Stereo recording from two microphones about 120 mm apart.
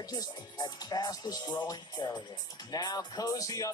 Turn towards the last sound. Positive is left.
turn(degrees=30)  # may be behind; listen again after turning